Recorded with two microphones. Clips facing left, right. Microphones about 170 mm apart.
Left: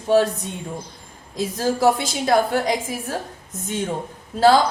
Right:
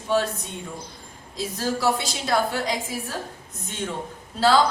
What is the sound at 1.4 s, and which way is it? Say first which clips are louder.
A woman's voice: left 5 dB; 50° left (ahead or behind).